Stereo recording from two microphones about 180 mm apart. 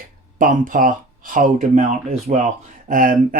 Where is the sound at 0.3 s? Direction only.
50° right (ahead or behind).